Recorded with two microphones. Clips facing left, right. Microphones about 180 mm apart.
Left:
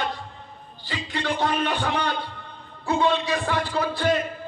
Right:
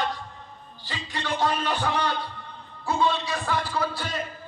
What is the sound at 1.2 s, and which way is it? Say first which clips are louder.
Music: left 1 dB; 60° left (ahead or behind).